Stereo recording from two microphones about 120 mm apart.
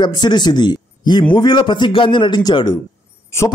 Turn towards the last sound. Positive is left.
turn(degrees=25)  # may be behind; listen again after turning